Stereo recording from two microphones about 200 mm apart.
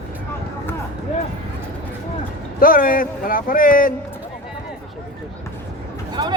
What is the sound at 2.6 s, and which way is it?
Speech, 45° left (ahead or behind).